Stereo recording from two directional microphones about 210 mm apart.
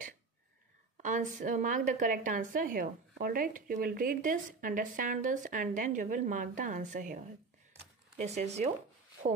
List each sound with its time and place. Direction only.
0.9 s a woman's voice: 35° right (ahead or behind)
8.2 s a woman's voice: 30° right (ahead or behind)